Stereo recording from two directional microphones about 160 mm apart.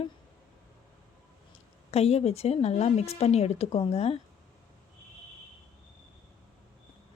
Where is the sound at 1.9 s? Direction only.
40° left (ahead or behind).